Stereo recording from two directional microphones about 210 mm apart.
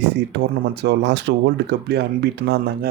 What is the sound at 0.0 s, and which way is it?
Speech, 55° right (ahead or behind).